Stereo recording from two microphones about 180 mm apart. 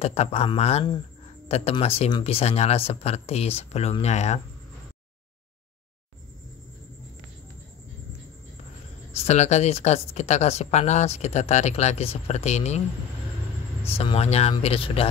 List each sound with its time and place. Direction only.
0.0 s speech: 35° left (ahead or behind)
9.1 s speech: 40° left (ahead or behind)
13.9 s speech: 35° left (ahead or behind)